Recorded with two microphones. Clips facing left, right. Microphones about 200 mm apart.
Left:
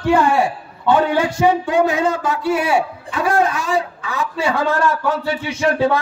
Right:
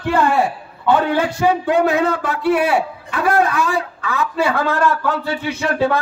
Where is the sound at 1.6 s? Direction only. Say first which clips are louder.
Right 1 dB; 60° right (ahead or behind).